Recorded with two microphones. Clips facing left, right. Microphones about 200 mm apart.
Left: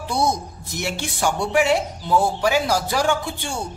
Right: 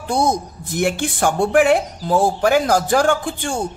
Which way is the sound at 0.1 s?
50° right (ahead or behind).